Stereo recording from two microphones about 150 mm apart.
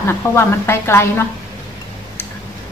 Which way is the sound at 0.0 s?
15° left (ahead or behind).